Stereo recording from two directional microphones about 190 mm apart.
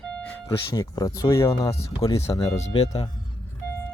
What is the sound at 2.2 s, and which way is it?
Speech, 15° left (ahead or behind).